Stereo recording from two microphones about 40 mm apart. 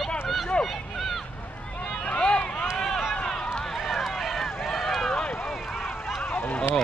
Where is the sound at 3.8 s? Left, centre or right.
Centre.